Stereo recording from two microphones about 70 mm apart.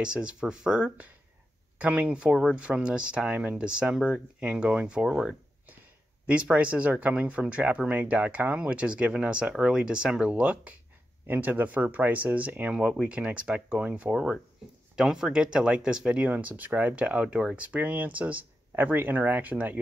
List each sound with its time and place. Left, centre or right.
0.0 s speech: centre
6.4 s speech: right
16.3 s speech: right